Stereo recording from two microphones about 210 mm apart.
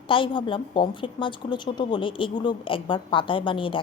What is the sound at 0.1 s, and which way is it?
A woman's voice, 25° left (ahead or behind).